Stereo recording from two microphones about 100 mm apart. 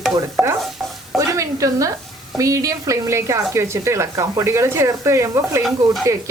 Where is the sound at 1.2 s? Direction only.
35° right (ahead or behind).